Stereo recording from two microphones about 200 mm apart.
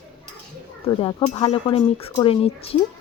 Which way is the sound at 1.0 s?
20° left (ahead or behind).